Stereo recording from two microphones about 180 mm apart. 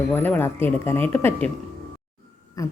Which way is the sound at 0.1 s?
10° left (ahead or behind).